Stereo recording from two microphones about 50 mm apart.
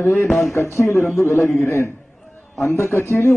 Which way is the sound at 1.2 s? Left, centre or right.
Left.